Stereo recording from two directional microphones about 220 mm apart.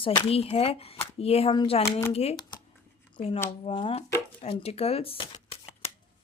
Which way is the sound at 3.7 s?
25° left (ahead or behind).